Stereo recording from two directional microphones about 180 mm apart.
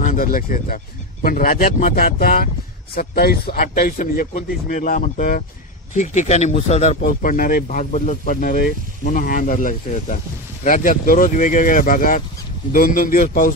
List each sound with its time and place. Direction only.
0.0 s speech: 50° left (ahead or behind)
7.0 s speech: 50° left (ahead or behind)